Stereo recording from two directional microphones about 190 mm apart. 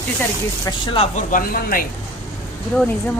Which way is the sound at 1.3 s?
45° left (ahead or behind).